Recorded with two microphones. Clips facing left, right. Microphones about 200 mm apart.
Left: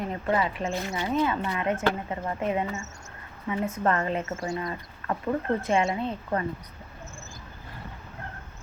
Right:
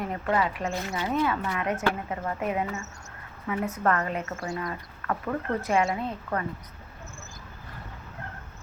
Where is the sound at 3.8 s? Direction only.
25° left (ahead or behind).